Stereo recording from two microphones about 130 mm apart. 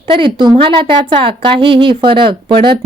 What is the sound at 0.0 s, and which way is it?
Speech, 40° right (ahead or behind).